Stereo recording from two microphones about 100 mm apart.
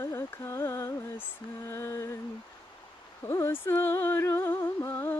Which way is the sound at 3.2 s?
30° left (ahead or behind).